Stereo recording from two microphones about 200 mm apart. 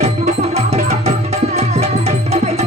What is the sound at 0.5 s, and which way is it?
Tabla, 35° right (ahead or behind).